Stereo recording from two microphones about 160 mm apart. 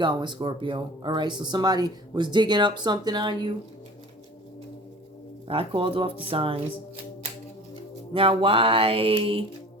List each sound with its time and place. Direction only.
0.0 s speech: 30° right (ahead or behind)
5.5 s music: 35° right (ahead or behind)
8.1 s music: 35° right (ahead or behind)